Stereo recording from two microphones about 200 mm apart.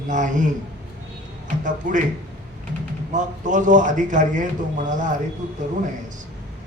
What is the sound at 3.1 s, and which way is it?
A man's voice, 40° right (ahead or behind).